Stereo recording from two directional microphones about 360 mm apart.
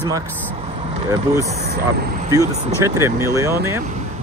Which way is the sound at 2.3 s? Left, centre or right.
Centre.